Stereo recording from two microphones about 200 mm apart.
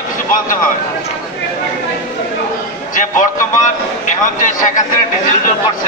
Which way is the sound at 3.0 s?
40° left (ahead or behind).